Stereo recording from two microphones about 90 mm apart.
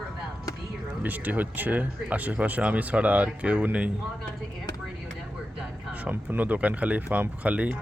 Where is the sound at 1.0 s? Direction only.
20° right (ahead or behind).